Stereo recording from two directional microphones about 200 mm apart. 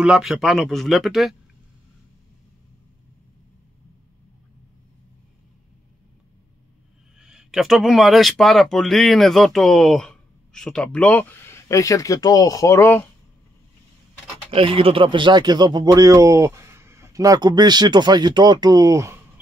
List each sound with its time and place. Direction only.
0.0 s speech: 5° right (ahead or behind)
7.2 s speech: 5° right (ahead or behind)
14.5 s speech: 30° right (ahead or behind)